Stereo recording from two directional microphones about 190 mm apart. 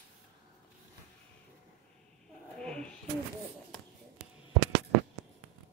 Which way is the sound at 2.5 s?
5° left (ahead or behind).